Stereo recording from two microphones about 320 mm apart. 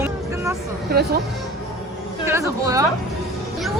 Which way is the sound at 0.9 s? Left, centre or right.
Right.